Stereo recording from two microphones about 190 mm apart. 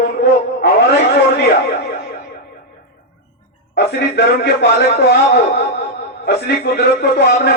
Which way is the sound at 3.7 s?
65° left (ahead or behind).